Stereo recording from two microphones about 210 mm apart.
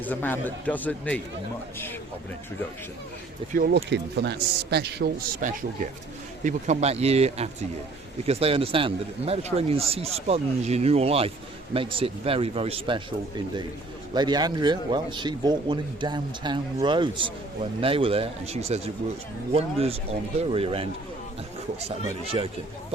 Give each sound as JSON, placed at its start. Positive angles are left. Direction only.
{"t": 0.0, "sound": "a man's voice", "side_deg": 10}
{"t": 3.5, "sound": "a man's voice", "side_deg": -45}